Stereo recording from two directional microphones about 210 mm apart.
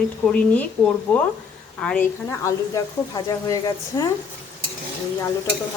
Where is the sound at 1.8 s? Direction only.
10° left (ahead or behind).